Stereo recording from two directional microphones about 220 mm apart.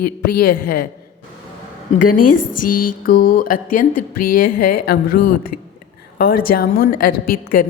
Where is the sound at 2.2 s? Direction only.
90° left.